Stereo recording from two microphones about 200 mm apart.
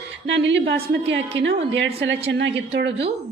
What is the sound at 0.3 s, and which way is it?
A woman's voice, 65° right (ahead or behind).